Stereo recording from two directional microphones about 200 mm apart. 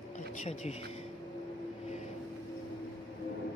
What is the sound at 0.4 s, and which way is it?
Speech, 35° left (ahead or behind).